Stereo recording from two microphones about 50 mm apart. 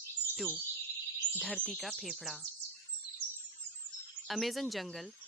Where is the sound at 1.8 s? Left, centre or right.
Centre.